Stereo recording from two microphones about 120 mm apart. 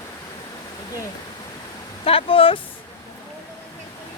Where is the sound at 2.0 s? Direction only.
50° left (ahead or behind).